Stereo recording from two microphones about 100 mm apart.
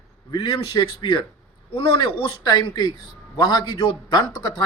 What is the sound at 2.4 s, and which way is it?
Speech, 40° left (ahead or behind).